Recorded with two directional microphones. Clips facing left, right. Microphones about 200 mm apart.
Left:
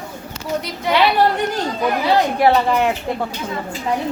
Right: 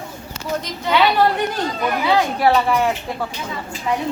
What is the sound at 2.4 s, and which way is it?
Speech, 20° left (ahead or behind).